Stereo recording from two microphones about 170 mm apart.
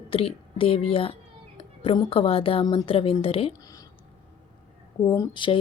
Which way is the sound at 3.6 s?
20° left (ahead or behind).